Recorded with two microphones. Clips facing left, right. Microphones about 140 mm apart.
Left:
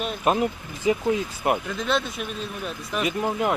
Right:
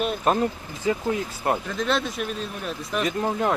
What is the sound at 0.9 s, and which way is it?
Speech, 20° left (ahead or behind).